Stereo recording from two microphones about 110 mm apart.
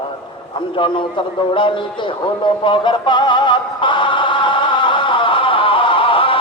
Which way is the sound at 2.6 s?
50° left (ahead or behind).